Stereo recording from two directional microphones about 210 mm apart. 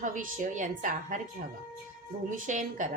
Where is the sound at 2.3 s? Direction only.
40° right (ahead or behind).